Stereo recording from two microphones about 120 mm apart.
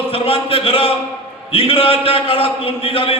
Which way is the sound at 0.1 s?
50° left (ahead or behind).